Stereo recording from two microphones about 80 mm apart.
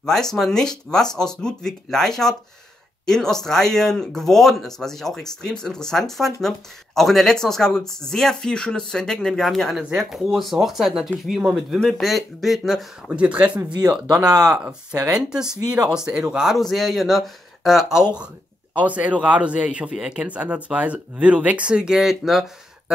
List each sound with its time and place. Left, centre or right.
0.0 s speech: centre
13.1 s speech: centre